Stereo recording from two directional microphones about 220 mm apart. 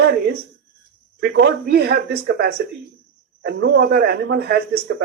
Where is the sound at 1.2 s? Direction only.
50° right (ahead or behind).